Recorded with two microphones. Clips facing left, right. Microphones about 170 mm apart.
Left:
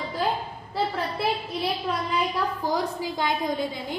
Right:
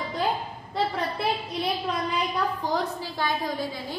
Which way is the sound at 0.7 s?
5° left (ahead or behind).